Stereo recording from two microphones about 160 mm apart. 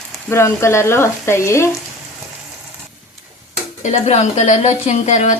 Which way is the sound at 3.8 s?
45° left (ahead or behind).